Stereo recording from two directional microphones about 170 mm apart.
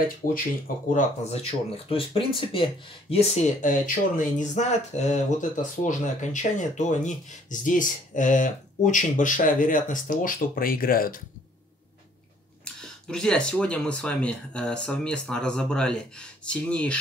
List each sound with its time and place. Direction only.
0.2 s speech: 20° left (ahead or behind)
0.9 s speech: 40° left (ahead or behind); by 11.1 s 60° left (ahead or behind)
12.8 s speech: 5° left (ahead or behind)